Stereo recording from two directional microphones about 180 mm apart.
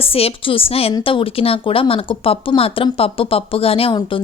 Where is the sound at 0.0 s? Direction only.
30° left (ahead or behind).